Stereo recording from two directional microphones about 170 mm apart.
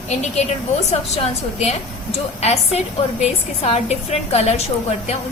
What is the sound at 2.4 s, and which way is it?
A woman's voice, 40° left (ahead or behind).